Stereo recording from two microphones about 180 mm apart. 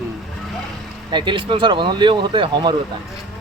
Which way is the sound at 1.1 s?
25° right (ahead or behind).